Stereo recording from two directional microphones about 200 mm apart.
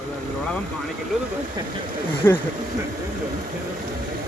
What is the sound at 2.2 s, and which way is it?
Speech, 10° left (ahead or behind).